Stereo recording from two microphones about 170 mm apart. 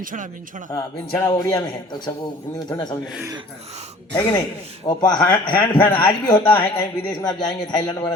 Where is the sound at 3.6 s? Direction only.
40° right (ahead or behind).